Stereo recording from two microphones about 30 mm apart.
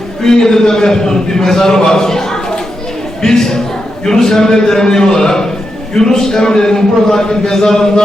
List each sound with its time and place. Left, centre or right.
0.2 s a man's voice: centre